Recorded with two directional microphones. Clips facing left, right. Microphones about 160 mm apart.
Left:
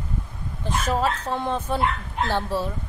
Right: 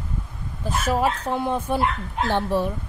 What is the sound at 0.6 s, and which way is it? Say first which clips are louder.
Speech: right 1 dB; 10° right (ahead or behind).